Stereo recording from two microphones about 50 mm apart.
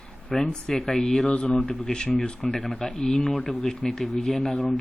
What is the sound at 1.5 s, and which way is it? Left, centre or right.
A man's voice, centre.